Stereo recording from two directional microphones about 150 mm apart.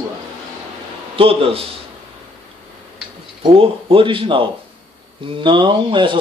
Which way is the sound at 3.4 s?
40° right (ahead or behind).